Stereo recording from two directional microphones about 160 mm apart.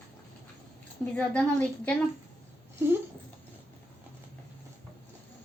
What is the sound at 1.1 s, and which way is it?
Speech, 5° left (ahead or behind).